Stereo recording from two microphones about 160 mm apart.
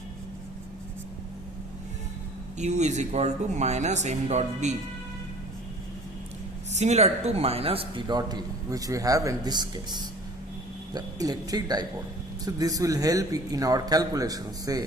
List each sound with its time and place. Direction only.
2.6 s speech: 45° right (ahead or behind)
6.7 s a man's voice: 45° right (ahead or behind); by 14.8 s 25° right (ahead or behind)